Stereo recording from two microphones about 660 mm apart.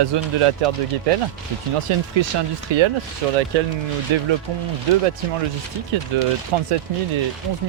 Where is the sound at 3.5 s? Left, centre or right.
Right.